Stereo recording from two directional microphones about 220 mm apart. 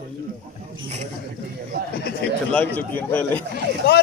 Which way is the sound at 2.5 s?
5° left (ahead or behind).